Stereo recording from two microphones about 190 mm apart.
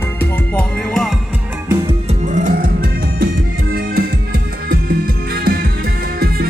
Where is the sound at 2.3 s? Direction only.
40° right (ahead or behind).